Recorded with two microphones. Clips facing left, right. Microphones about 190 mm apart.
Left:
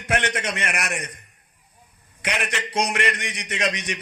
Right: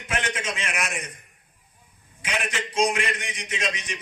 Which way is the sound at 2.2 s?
65° left (ahead or behind).